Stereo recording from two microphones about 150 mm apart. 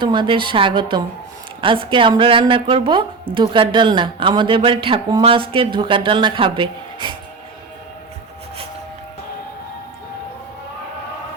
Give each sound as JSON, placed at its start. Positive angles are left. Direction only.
{"t": 0.0, "sound": "a woman's voice", "side_deg": -30}